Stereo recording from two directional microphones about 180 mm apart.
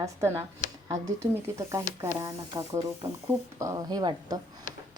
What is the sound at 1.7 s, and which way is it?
A woman's voice, 20° right (ahead or behind).